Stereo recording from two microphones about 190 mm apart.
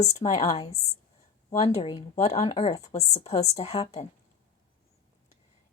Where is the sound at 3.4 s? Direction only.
35° left (ahead or behind).